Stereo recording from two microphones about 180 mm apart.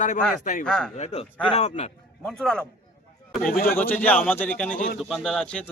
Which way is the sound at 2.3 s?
5° left (ahead or behind).